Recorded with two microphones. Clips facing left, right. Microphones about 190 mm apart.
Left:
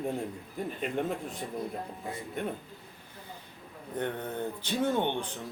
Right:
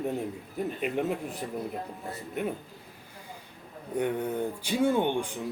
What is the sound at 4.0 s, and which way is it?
Speech, 10° right (ahead or behind).